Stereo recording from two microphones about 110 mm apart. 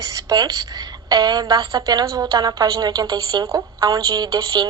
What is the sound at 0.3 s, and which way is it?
A woman's voice, 40° right (ahead or behind).